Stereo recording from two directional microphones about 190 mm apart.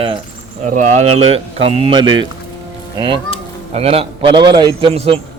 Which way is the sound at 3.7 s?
30° right (ahead or behind).